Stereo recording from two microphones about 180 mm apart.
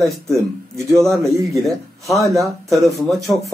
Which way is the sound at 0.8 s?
15° right (ahead or behind).